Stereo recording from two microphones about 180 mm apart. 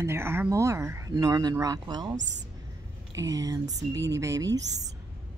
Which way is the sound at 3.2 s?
20° right (ahead or behind).